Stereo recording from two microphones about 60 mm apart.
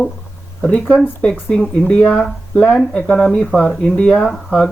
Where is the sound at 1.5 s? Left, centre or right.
Centre.